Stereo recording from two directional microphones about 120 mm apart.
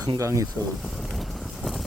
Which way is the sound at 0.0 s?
30° right (ahead or behind).